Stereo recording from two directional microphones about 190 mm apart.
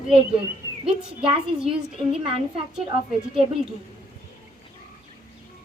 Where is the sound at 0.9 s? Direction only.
30° right (ahead or behind).